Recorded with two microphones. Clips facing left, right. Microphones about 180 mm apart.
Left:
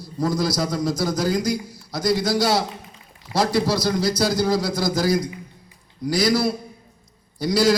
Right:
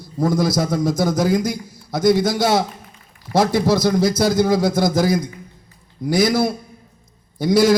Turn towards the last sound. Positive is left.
turn(degrees=-50)  # may be behind; listen again after turning